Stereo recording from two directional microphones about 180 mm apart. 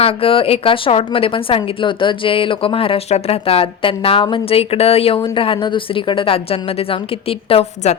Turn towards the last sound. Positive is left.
turn(degrees=35)  # may be behind; listen again after turning